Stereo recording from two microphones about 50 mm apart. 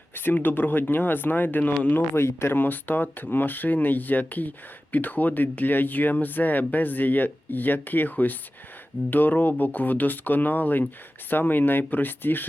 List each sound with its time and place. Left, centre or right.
0.1 s speech: left
2.1 s speech: left
2.6 s speech: left